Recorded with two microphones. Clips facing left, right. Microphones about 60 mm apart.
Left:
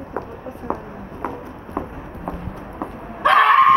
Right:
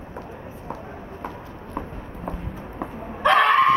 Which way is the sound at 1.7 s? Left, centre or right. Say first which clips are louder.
Left 4 dB; centre.